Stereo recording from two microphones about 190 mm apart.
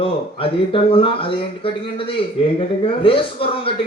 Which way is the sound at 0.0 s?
30° left (ahead or behind).